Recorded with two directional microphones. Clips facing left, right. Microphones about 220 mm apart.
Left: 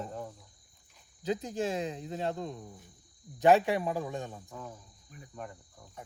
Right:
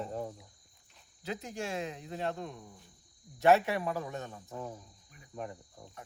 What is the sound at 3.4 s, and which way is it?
Speech, 15° left (ahead or behind).